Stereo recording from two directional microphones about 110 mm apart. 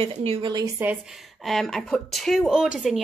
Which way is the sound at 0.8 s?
20° right (ahead or behind).